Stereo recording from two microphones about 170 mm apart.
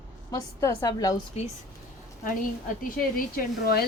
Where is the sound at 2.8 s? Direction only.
55° left (ahead or behind).